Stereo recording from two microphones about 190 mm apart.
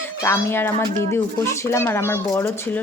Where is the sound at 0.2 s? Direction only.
15° left (ahead or behind).